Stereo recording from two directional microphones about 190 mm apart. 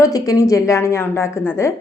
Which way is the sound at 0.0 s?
20° left (ahead or behind).